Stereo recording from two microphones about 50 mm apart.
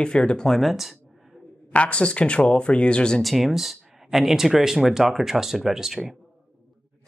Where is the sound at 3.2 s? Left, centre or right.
Centre.